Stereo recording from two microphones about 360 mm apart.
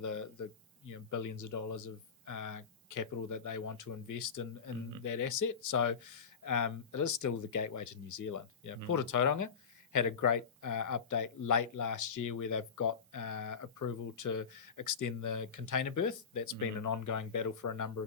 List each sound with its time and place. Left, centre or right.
0.0 s a man's voice: left